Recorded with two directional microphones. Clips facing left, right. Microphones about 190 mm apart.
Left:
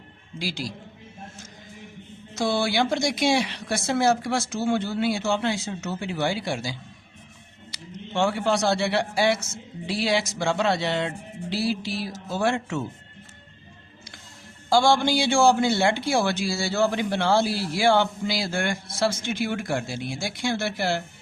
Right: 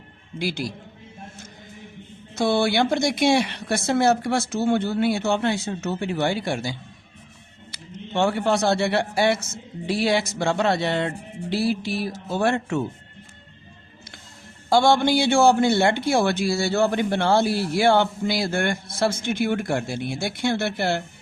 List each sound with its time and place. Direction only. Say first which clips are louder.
0.3 s a man's voice: right 4 dB; 55° right (ahead or behind)
2.3 s a man's voice: right 3 dB; 55° right (ahead or behind)
14.7 s a man's voice: right 2 dB; 60° right (ahead or behind)